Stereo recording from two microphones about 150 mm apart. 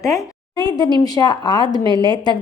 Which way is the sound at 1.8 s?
30° right (ahead or behind).